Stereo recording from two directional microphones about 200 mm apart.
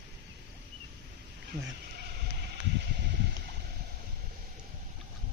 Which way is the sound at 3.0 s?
55° right (ahead or behind).